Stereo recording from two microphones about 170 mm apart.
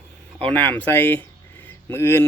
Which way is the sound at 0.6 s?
10° left (ahead or behind).